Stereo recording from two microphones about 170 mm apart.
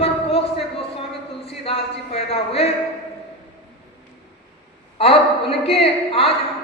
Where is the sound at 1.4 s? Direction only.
35° left (ahead or behind).